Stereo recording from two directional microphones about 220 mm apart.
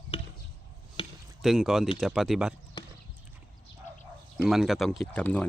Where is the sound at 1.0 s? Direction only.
25° left (ahead or behind).